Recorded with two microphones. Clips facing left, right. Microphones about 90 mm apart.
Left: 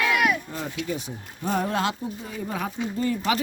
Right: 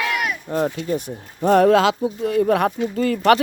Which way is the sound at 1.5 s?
90° right.